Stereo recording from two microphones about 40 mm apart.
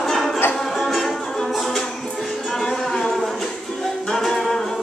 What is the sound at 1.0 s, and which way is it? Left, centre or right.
Music, centre.